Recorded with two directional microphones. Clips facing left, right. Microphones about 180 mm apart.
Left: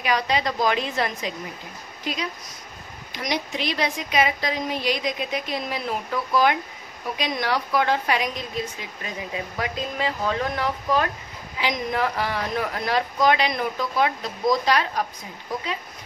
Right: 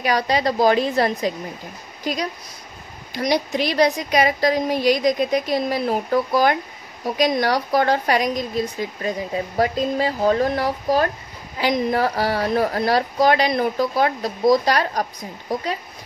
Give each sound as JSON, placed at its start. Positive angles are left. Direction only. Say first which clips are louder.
{"t": 0.0, "sound": "a woman's voice", "louder": "right 4 dB", "side_deg": -35}